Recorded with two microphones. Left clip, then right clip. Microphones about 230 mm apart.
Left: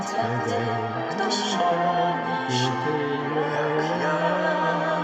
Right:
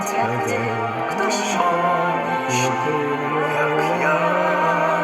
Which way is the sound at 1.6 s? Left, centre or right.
Right.